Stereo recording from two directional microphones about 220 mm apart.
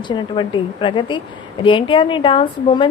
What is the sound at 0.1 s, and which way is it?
A woman's voice, 20° left (ahead or behind).